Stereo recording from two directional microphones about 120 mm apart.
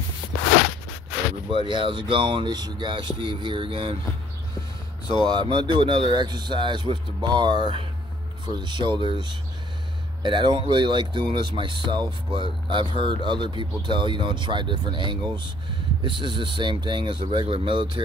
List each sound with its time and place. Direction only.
1.5 s speech: 45° right (ahead or behind)
5.2 s speech: 35° right (ahead or behind)